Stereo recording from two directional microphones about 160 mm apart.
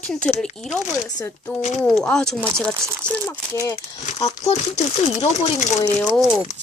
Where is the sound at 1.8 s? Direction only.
Centre (ahead or behind).